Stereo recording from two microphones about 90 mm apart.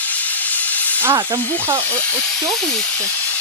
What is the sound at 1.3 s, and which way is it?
Speech, 20° left (ahead or behind).